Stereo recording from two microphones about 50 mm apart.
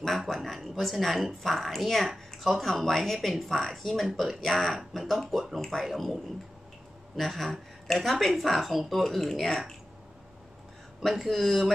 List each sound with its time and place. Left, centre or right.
0.3 s a woman's voice: centre
7.2 s speech: centre
11.1 s speech: centre